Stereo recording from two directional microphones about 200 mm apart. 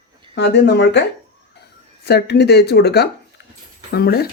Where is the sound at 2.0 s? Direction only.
55° left (ahead or behind).